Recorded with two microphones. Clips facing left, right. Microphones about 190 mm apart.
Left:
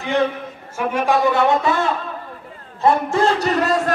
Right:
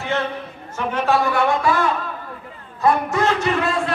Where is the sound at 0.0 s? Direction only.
15° left (ahead or behind).